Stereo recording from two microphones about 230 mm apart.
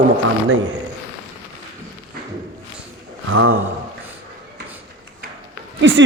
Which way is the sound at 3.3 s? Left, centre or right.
Right.